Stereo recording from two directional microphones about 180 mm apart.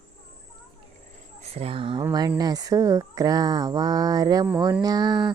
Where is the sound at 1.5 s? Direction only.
30° right (ahead or behind).